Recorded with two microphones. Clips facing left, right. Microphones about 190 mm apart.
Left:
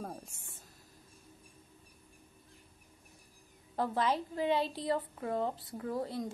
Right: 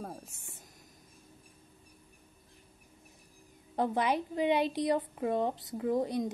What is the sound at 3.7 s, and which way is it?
A woman's voice, 20° right (ahead or behind).